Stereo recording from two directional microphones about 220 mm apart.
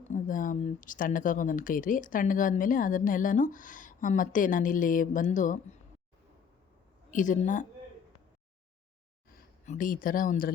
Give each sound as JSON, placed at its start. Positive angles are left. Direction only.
{"t": 0.1, "sound": "speech", "side_deg": 35}
{"t": 7.1, "sound": "speech", "side_deg": 35}
{"t": 9.3, "sound": "speech", "side_deg": 35}